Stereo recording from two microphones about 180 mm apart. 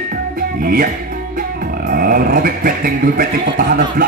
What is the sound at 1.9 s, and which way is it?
Speech, 55° right (ahead or behind).